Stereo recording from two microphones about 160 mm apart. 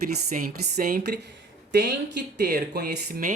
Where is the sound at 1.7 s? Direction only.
90° right.